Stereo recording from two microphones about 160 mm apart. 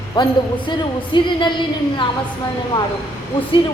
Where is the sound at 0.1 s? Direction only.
30° left (ahead or behind).